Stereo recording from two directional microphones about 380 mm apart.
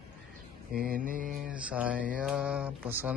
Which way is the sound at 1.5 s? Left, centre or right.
Centre.